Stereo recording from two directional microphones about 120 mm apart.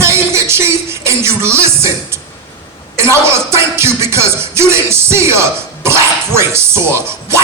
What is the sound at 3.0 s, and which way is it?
Music, 20° right (ahead or behind).